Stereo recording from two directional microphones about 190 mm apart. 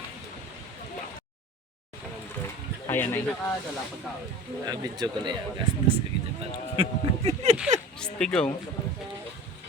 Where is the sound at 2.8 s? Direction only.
10° left (ahead or behind).